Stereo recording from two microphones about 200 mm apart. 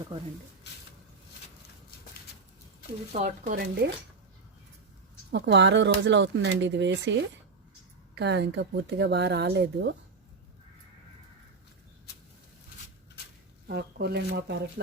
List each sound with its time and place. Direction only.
3.1 s speech: 40° right (ahead or behind)
5.3 s speech: 65° right (ahead or behind)
13.7 s speech: 55° right (ahead or behind)